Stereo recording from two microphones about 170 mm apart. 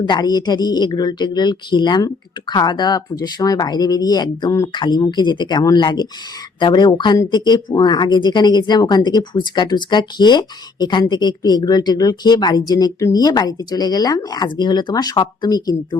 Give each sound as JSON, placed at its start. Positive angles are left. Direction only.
{"t": 0.0, "sound": "speech", "side_deg": 25}